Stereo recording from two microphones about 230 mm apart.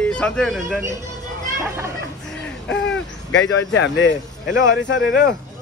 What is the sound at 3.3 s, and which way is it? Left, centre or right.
Speech, left.